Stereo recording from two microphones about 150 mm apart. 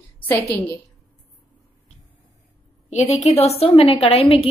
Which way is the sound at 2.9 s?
50° left (ahead or behind).